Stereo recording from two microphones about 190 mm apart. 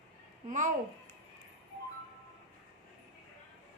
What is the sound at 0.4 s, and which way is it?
Speech, 40° right (ahead or behind).